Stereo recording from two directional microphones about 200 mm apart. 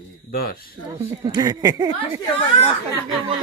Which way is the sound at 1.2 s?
20° right (ahead or behind).